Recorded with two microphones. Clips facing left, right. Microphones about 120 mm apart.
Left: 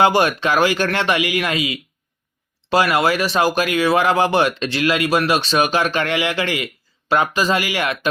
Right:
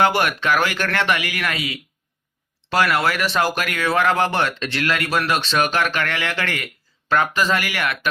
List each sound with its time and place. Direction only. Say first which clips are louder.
0.0 s speech: left 3 dB; 15° left (ahead or behind)